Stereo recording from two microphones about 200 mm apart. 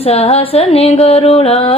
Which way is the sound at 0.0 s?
30° left (ahead or behind).